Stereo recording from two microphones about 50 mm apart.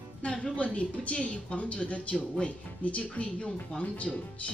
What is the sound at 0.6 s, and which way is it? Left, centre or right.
A woman's voice, left.